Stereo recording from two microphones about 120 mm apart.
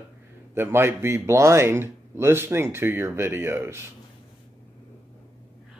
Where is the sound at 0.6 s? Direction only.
20° right (ahead or behind).